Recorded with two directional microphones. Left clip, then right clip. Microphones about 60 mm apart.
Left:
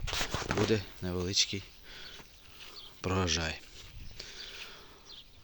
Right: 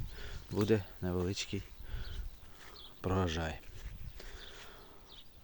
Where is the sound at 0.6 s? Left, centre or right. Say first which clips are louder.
Right 2 dB; centre.